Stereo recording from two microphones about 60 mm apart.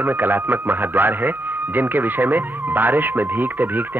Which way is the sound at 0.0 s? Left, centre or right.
Right.